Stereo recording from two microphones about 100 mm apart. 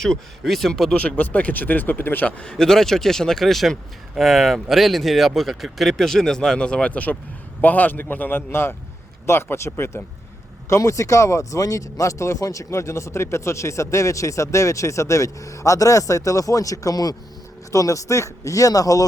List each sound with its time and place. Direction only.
0.0 s a man's voice: 5° left (ahead or behind); by 19.0 s 35° left (ahead or behind)